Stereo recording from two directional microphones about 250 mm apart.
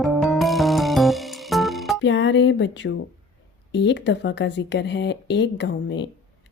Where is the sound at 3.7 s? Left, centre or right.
Left.